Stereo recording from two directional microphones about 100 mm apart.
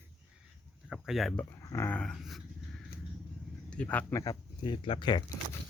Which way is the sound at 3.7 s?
10° left (ahead or behind).